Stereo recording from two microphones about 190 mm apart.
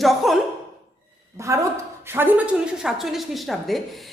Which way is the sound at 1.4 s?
15° right (ahead or behind).